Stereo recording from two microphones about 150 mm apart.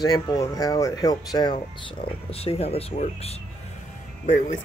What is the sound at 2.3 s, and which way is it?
Speech, 40° left (ahead or behind).